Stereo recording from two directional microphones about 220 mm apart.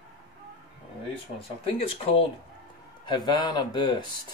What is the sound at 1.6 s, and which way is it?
Speech, 25° left (ahead or behind).